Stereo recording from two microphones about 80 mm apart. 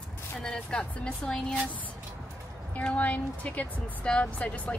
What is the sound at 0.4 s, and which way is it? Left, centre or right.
Speech, centre.